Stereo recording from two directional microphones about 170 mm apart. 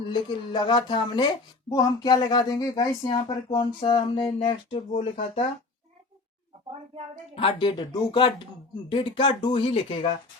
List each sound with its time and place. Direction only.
0.1 s speech: 25° left (ahead or behind)
7.3 s speech: 30° left (ahead or behind)